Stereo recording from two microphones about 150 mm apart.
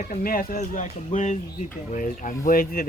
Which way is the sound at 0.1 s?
70° left (ahead or behind).